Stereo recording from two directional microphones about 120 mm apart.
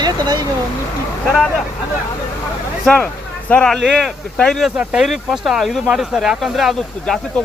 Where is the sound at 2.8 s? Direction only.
10° left (ahead or behind).